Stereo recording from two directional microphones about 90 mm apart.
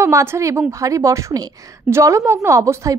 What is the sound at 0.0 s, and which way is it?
Speech, 30° right (ahead or behind).